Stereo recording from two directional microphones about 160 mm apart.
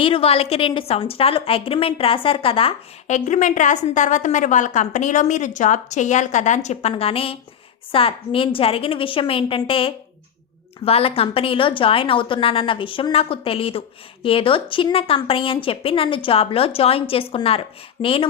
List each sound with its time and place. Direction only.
0.0 s a woman's voice: 35° left (ahead or behind)